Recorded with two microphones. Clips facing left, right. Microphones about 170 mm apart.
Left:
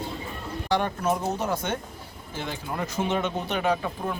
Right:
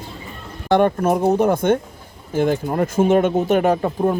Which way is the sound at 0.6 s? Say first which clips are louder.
Right 9 dB; 55° right (ahead or behind).